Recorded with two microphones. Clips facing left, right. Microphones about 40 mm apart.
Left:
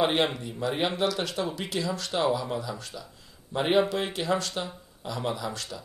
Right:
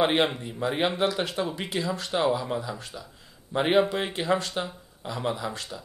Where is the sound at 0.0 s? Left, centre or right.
Centre.